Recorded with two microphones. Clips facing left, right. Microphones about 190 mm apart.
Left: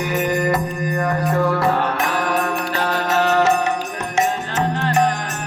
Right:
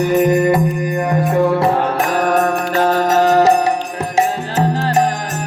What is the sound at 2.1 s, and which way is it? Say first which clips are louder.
Music: right 6 dB; 45° right (ahead or behind).